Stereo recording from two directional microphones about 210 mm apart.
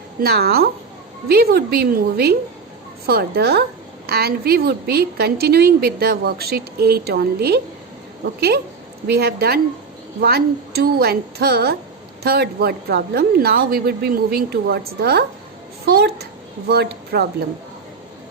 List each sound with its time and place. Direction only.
0.2 s a woman's voice: 50° right (ahead or behind)